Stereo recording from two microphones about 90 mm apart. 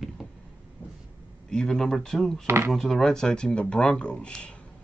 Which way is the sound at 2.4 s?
30° right (ahead or behind).